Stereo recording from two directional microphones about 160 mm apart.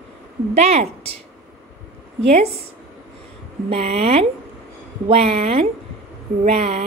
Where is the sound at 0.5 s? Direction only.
40° right (ahead or behind).